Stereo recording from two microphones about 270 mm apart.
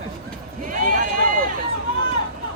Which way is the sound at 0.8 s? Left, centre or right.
Right.